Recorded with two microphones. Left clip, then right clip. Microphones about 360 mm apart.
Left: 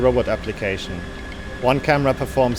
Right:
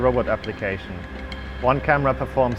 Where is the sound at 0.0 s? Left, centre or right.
Right.